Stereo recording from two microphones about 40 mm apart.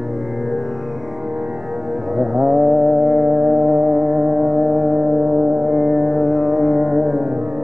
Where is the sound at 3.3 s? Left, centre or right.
Right; by 7.2 s centre.